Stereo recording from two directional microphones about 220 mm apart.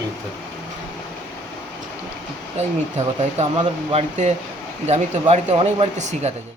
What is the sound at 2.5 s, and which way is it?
Speech, 30° right (ahead or behind).